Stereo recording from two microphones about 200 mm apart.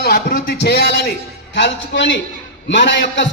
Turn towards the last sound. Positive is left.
turn(degrees=60)  # may be behind; listen again after turning